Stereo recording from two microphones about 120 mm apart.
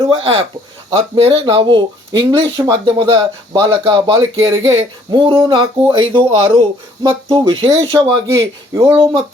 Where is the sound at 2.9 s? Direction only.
40° right (ahead or behind).